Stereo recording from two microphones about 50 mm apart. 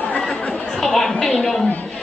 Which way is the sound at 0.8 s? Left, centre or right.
Centre.